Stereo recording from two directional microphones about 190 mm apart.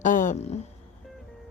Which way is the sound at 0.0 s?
40° left (ahead or behind).